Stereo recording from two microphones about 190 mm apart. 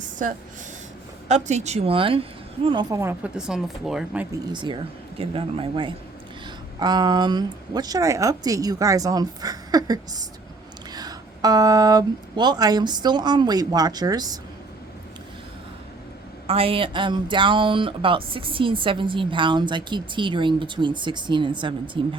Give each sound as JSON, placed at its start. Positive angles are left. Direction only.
{"t": 0.2, "sound": "a woman's voice", "side_deg": -45}
{"t": 4.5, "sound": "speech", "side_deg": -25}
{"t": 16.5, "sound": "speech", "side_deg": -30}